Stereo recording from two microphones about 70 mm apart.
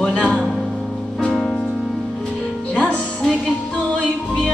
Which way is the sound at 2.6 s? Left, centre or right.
Centre.